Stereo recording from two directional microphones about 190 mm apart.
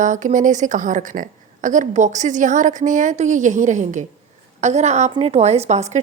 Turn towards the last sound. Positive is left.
turn(degrees=-35)  # may be behind; listen again after turning